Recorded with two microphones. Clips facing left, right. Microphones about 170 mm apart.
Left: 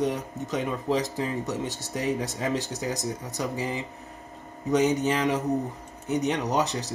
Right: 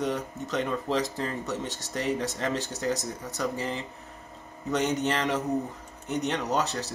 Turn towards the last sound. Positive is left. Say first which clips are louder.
# left 2 dB
turn(degrees=15)  # may be behind; listen again after turning